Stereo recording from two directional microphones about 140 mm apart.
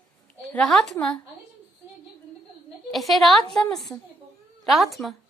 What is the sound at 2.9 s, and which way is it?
A woman's voice, centre (ahead or behind).